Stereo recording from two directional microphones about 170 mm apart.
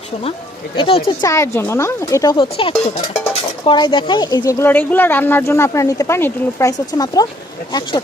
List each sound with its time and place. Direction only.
0.8 s speech: 30° left (ahead or behind)
1.2 s speech: 15° left (ahead or behind)